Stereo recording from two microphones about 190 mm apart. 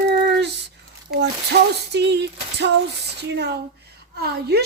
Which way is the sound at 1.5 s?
60° right (ahead or behind).